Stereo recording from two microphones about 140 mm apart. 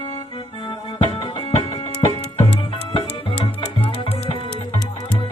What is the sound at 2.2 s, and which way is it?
Music, 35° left (ahead or behind).